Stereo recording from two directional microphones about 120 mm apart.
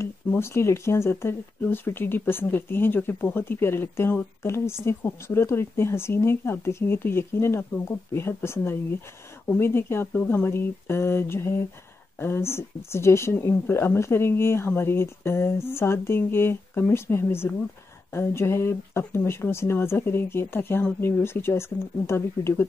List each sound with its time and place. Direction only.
0.0 s speech: 20° left (ahead or behind)